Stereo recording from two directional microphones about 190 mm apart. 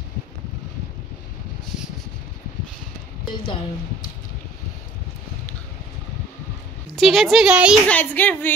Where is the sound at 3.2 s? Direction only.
25° left (ahead or behind).